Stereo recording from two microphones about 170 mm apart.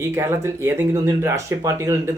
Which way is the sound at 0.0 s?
15° right (ahead or behind).